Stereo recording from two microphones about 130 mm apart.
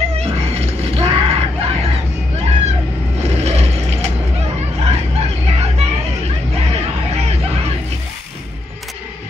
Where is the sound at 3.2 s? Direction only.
55° right (ahead or behind).